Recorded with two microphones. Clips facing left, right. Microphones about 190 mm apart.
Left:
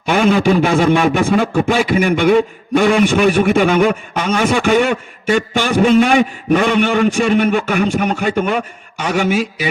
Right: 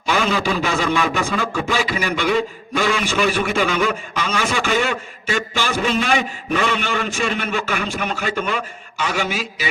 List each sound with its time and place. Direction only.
0.0 s a man's voice: 55° left (ahead or behind)